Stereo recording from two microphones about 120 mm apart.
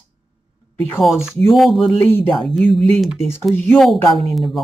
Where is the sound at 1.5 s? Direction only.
Centre (ahead or behind).